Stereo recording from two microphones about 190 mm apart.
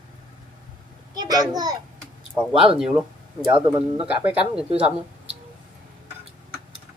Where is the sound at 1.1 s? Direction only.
20° right (ahead or behind).